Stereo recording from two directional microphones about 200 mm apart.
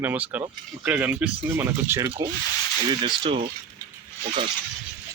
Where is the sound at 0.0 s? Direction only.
10° right (ahead or behind).